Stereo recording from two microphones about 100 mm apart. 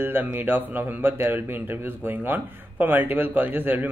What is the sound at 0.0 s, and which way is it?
Speech, 20° right (ahead or behind).